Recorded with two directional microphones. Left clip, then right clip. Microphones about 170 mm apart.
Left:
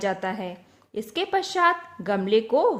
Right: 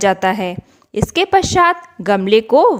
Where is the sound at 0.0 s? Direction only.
45° right (ahead or behind).